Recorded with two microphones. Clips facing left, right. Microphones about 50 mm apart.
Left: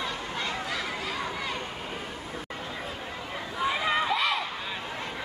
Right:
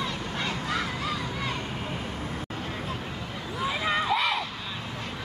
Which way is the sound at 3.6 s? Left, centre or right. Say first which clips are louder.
Left 1 dB; centre.